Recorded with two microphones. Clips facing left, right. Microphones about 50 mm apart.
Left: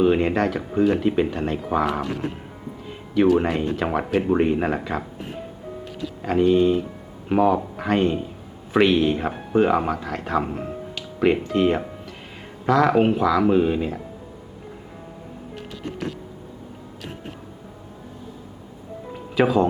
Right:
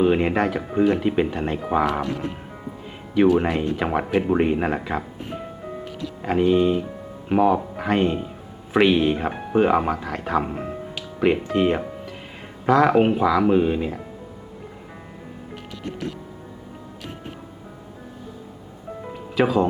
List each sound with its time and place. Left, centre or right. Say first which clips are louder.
0.0 s speech: even; centre
2.8 s speech: right 1 dB; centre
6.2 s speech: left 1 dB; centre
19.4 s speech: left 1 dB; centre